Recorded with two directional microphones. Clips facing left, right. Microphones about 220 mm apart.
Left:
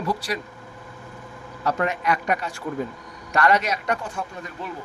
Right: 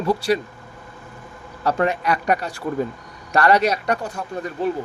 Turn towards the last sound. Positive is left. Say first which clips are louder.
# right 10 dB
turn(degrees=-35)  # may be behind; listen again after turning